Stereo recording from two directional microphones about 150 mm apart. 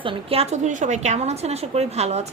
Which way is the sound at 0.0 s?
35° right (ahead or behind).